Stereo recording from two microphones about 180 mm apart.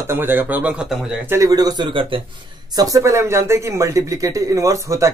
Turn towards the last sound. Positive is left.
turn(degrees=-15)  # may be behind; listen again after turning